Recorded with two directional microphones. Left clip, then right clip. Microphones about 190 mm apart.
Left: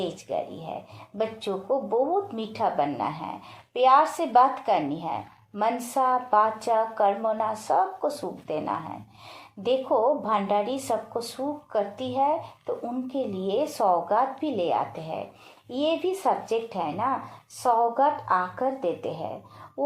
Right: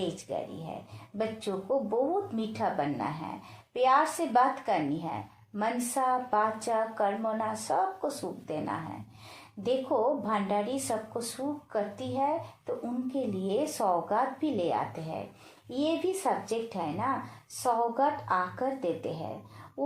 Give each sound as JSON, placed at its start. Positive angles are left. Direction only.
{"t": 0.3, "sound": "a woman's voice", "side_deg": 25}